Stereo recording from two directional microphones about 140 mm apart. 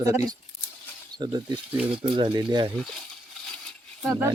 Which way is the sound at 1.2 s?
30° right (ahead or behind).